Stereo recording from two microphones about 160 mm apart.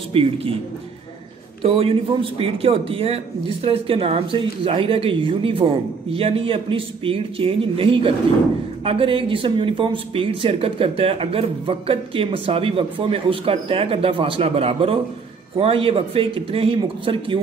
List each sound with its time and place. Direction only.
0.1 s a man's voice: 35° right (ahead or behind)
1.6 s a man's voice: 40° right (ahead or behind)